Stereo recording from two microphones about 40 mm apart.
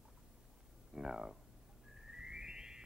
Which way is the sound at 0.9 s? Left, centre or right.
Centre.